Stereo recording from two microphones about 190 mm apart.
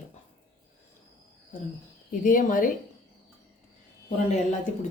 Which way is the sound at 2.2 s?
45° left (ahead or behind).